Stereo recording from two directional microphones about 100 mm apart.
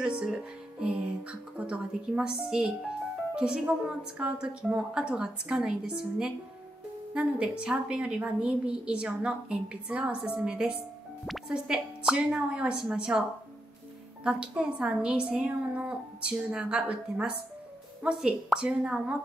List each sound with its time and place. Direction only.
0.0 s a woman's voice: 5° right (ahead or behind)
14.2 s a woman's voice: 10° right (ahead or behind)